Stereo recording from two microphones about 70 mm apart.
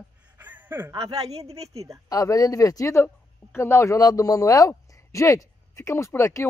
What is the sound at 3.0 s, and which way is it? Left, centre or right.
Speech, left.